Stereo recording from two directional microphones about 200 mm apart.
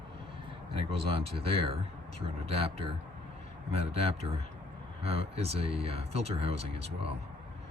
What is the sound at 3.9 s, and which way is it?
Speech, 30° right (ahead or behind).